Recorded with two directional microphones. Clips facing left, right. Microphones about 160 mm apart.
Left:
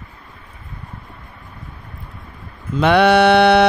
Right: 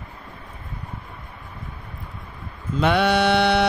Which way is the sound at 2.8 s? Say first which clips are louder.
Left 7 dB; 75° left (ahead or behind).